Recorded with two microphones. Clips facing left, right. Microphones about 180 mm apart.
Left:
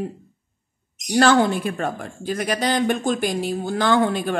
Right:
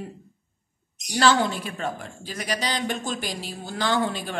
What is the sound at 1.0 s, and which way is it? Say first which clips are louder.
Speech: left 5 dB; 55° left (ahead or behind).